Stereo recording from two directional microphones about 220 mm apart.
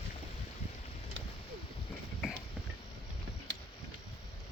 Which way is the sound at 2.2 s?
Centre (ahead or behind).